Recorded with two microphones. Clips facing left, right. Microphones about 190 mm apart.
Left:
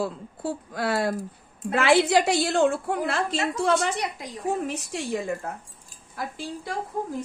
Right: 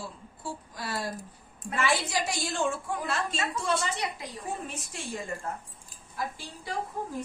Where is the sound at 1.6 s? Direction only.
75° left (ahead or behind).